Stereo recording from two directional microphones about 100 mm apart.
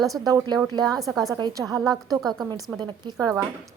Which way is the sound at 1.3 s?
45° right (ahead or behind).